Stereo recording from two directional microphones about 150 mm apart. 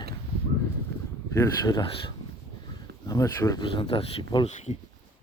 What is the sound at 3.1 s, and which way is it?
Speech, 25° left (ahead or behind).